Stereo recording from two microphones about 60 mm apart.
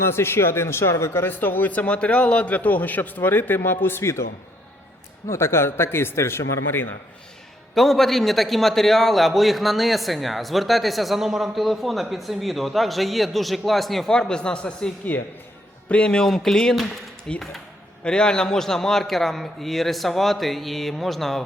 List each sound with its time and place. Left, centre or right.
0.0 s a man's voice: left
1.3 s a man's voice: left
5.3 s a man's voice: left
7.8 s a man's voice: centre
14.1 s speech: centre
15.1 s a man's voice: left
15.9 s a man's voice: centre